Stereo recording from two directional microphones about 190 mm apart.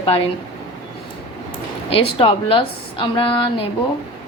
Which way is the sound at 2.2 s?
30° left (ahead or behind).